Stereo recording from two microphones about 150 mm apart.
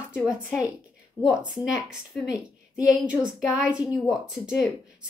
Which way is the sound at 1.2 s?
20° left (ahead or behind).